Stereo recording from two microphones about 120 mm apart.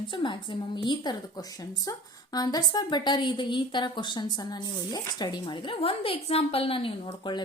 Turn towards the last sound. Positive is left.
turn(degrees=45)  # may be behind; listen again after turning